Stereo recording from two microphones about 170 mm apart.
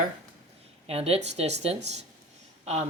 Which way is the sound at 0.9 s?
35° right (ahead or behind).